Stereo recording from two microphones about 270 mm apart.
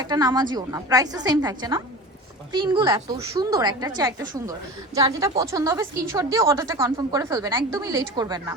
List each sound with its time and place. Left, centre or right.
0.0 s a woman's voice: centre